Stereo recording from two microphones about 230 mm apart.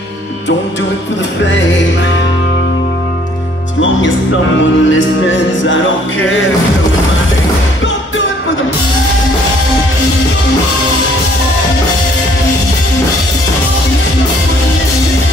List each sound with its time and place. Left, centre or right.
4.6 s music: left